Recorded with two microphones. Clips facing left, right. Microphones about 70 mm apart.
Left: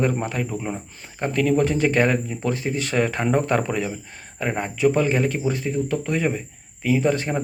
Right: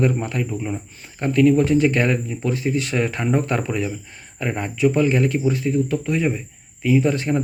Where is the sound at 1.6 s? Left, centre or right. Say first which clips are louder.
Right 2 dB; left.